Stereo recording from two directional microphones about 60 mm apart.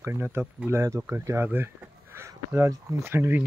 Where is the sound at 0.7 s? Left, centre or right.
Right.